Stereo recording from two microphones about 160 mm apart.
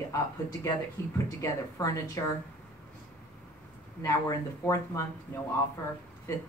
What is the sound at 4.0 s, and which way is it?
Speech, 20° left (ahead or behind).